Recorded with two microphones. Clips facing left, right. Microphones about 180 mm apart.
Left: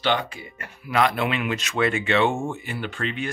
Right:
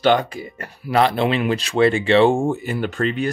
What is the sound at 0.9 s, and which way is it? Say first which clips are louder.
Speech: right 5 dB; 30° right (ahead or behind).